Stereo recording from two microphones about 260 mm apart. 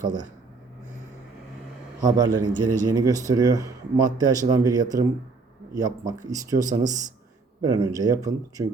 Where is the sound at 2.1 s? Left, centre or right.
Centre.